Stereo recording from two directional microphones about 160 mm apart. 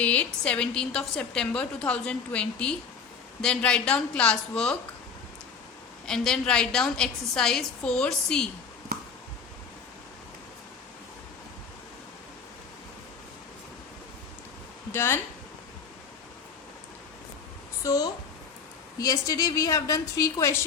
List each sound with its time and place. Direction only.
0.0 s a woman's voice: 10° left (ahead or behind)
6.1 s a woman's voice: 5° left (ahead or behind)
14.9 s a woman's voice: 15° left (ahead or behind)
17.8 s a woman's voice: 20° left (ahead or behind)